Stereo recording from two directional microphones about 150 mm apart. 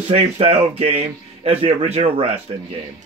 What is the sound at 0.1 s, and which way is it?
Speech, 40° right (ahead or behind).